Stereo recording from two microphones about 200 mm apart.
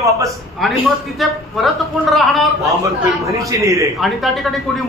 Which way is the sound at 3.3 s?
15° right (ahead or behind).